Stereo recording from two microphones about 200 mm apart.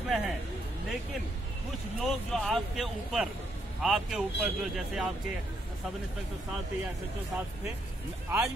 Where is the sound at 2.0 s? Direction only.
Centre (ahead or behind).